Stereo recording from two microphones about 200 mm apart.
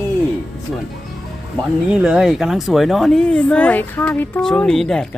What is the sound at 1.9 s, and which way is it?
Speech, 5° right (ahead or behind).